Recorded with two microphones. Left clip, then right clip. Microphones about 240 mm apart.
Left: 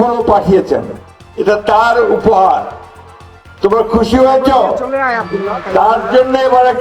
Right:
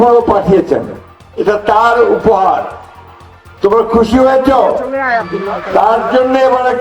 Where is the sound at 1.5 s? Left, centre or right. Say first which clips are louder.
Even; left.